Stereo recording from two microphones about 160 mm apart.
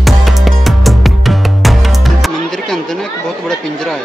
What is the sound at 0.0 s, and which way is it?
Music, centre (ahead or behind).